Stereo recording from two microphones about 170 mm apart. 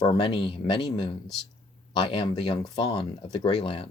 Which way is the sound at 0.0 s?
25° left (ahead or behind).